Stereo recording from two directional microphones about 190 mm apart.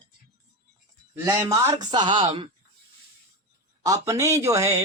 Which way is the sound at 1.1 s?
10° right (ahead or behind).